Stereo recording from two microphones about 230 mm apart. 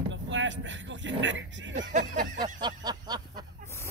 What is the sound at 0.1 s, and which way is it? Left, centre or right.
Speech, right.